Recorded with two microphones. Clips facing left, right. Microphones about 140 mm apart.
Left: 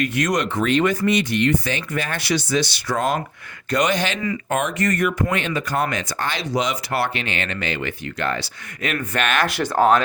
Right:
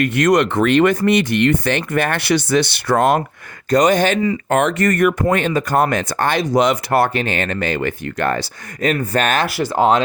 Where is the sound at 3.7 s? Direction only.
40° right (ahead or behind).